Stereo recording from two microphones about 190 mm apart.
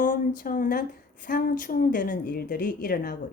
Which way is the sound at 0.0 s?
45° left (ahead or behind).